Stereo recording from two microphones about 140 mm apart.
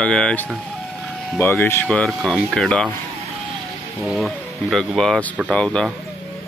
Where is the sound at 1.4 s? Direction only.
15° left (ahead or behind).